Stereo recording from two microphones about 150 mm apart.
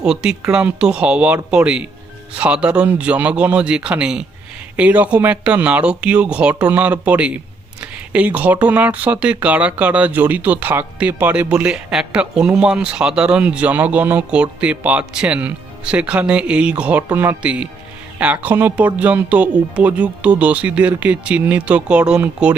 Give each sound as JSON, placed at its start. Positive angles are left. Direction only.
{"t": 0.0, "sound": "speech", "side_deg": -5}